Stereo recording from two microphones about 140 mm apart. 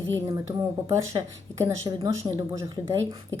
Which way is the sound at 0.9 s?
25° right (ahead or behind).